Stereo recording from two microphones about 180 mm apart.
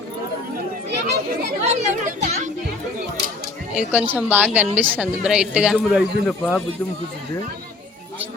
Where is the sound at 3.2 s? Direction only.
70° right (ahead or behind).